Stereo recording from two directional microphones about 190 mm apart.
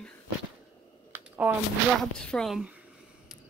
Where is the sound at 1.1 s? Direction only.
10° right (ahead or behind).